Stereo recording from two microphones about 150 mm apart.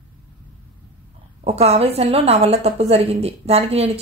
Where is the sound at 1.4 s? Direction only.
45° right (ahead or behind).